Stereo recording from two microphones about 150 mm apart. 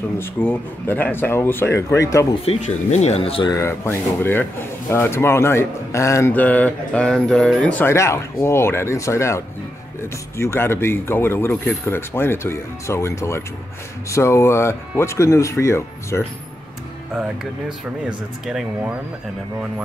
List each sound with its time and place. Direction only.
0.2 s speech: 15° left (ahead or behind)
2.4 s speech: 45° left (ahead or behind)
3.4 s speech: 20° left (ahead or behind)
17.1 s speech: 5° right (ahead or behind)